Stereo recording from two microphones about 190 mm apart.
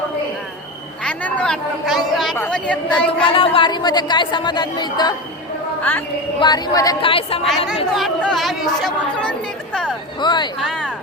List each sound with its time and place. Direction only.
1.0 s a woman's voice: 5° left (ahead or behind)
3.1 s speech: 30° left (ahead or behind)
5.9 s a woman's voice: 10° left (ahead or behind)
6.4 s speech: 20° left (ahead or behind)
7.9 s a woman's voice: centre (ahead or behind)
10.2 s speech: 25° left (ahead or behind)
10.6 s speech: centre (ahead or behind)